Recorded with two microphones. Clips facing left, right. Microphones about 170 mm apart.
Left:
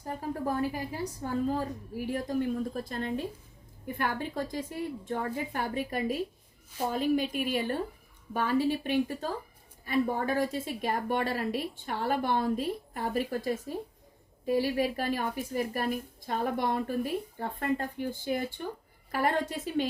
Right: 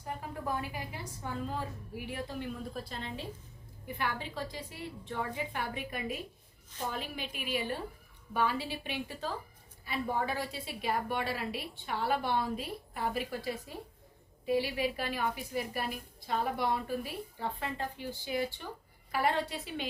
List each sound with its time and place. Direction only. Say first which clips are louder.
0.2 s a woman's voice: left 9 dB; 40° left (ahead or behind)